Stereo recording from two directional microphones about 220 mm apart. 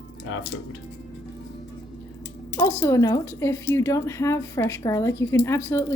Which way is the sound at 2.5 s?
10° left (ahead or behind).